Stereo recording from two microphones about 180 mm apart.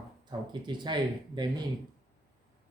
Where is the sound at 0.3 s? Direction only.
25° right (ahead or behind).